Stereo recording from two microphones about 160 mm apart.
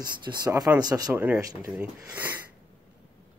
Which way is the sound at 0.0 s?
25° right (ahead or behind).